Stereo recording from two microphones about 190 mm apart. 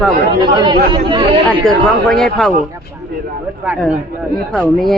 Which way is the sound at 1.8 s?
Centre (ahead or behind).